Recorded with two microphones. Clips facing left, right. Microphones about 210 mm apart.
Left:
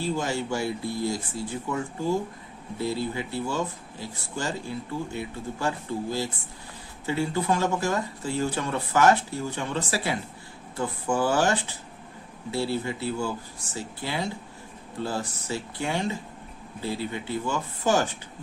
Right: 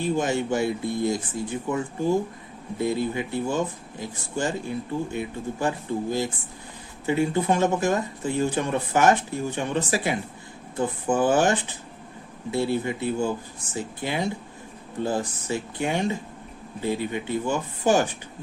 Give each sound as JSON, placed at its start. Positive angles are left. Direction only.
{"t": 0.0, "sound": "speech", "side_deg": -20}
{"t": 2.7, "sound": "speech", "side_deg": -20}